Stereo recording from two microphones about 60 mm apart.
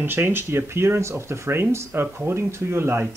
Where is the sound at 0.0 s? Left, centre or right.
Right.